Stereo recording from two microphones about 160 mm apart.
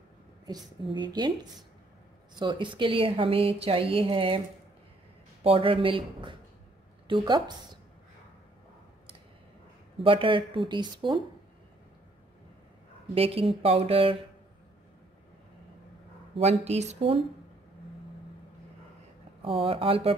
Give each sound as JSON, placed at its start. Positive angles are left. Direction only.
{"t": 0.8, "sound": "a woman's voice", "side_deg": -30}
{"t": 5.4, "sound": "a woman's voice", "side_deg": -35}
{"t": 10.0, "sound": "a woman's voice", "side_deg": -30}
{"t": 13.1, "sound": "a woman's voice", "side_deg": -35}
{"t": 16.3, "sound": "speech", "side_deg": -45}
{"t": 19.4, "sound": "a woman's voice", "side_deg": -35}